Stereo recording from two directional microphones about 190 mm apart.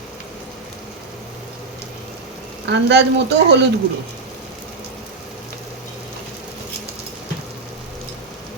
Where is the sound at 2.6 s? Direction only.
65° right (ahead or behind).